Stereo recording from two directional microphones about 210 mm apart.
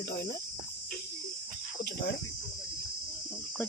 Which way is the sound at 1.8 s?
50° left (ahead or behind).